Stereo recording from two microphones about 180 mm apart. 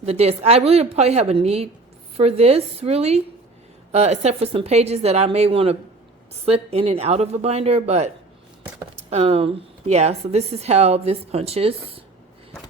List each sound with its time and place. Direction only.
0.0 s speech: 35° right (ahead or behind)